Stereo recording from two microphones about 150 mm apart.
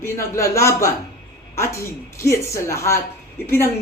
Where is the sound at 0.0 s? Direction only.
20° left (ahead or behind).